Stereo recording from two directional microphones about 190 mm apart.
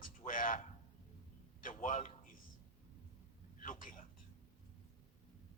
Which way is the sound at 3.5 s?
45° left (ahead or behind).